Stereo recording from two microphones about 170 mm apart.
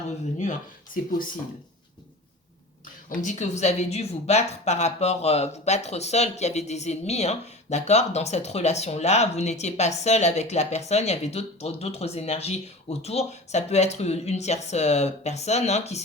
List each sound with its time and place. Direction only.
3.2 s speech: 45° left (ahead or behind)